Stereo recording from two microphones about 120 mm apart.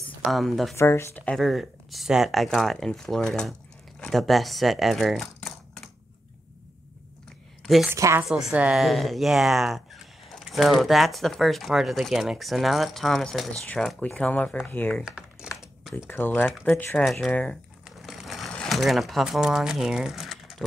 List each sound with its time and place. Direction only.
0.2 s speech: centre (ahead or behind)
0.7 s speech: 25° left (ahead or behind)
1.2 s speech: 5° left (ahead or behind)
7.6 s a woman's voice: centre (ahead or behind)
7.9 s speech: 25° right (ahead or behind)
8.2 s speech: 5° right (ahead or behind); by 15.0 s 15° left (ahead or behind)
15.0 s typing: 5° right (ahead or behind)
16.1 s speech: 15° left (ahead or behind)
17.0 s speech: centre (ahead or behind)
17.8 s sewing machine: centre (ahead or behind)
18.5 s speech: 5° left (ahead or behind)